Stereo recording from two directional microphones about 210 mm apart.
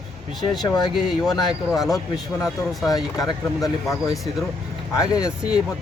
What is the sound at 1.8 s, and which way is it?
Cricket, centre (ahead or behind).